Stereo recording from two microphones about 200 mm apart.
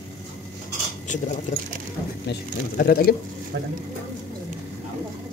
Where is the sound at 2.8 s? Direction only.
50° left (ahead or behind).